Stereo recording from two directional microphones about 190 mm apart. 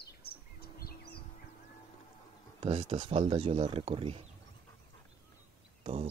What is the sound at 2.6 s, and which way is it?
Speech, 30° right (ahead or behind).